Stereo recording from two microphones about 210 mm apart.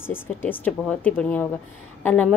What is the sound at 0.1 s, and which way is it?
A woman's voice, 10° left (ahead or behind).